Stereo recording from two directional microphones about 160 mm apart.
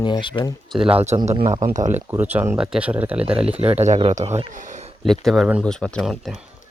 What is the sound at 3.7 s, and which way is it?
Speech, 45° right (ahead or behind).